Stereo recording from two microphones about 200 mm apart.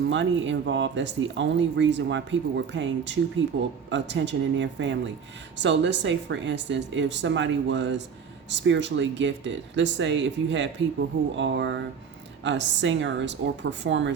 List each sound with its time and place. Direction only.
0.1 s speech: 65° right (ahead or behind)